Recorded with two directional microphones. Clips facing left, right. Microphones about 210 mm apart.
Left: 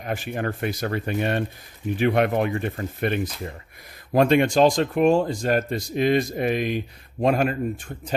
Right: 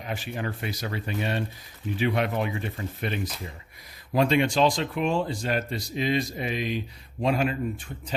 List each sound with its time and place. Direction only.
0.0 s speech: 50° left (ahead or behind)